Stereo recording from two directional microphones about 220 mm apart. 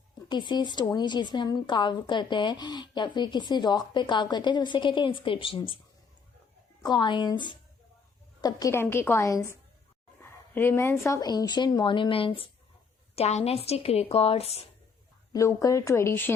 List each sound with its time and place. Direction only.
0.3 s a woman's voice: 20° left (ahead or behind)
6.8 s a woman's voice: 20° left (ahead or behind)
15.3 s speech: 15° left (ahead or behind)